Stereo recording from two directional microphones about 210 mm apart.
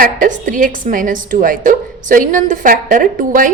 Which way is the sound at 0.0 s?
40° right (ahead or behind).